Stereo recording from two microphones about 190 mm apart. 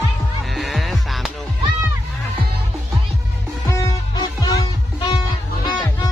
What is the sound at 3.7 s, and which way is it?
Music, 15° left (ahead or behind).